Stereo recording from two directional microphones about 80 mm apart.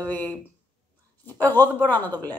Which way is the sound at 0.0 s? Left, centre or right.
Left.